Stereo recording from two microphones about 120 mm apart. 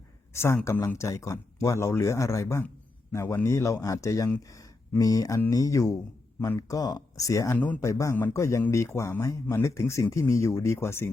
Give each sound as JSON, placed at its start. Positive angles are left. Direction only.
{"t": 0.3, "sound": "speech", "side_deg": 20}